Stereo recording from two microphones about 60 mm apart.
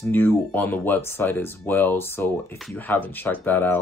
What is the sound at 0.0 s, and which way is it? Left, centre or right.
Speech, left.